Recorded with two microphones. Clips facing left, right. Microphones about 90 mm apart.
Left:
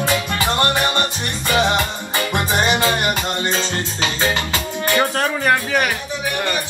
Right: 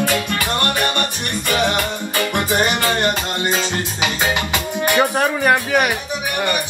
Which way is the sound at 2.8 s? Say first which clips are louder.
Even; 15° left (ahead or behind).